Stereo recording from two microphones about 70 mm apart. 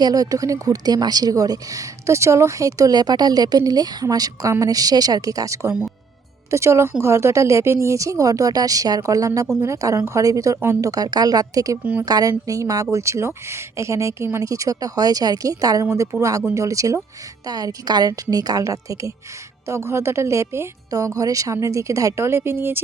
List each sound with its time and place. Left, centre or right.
0.0 s a woman's voice: right
4.0 s a woman's voice: right
6.5 s a woman's voice: right
11.8 s a woman's voice: right
12.0 s a woman's voice: right
17.4 s a woman's voice: right
19.6 s speech: right
20.9 s a woman's voice: right